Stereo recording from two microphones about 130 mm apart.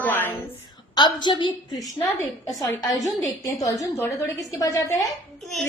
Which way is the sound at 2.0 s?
25° left (ahead or behind).